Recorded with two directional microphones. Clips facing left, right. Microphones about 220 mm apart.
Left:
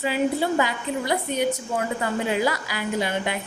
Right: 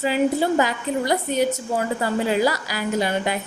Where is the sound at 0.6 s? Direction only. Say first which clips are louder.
Right 3 dB; 40° right (ahead or behind).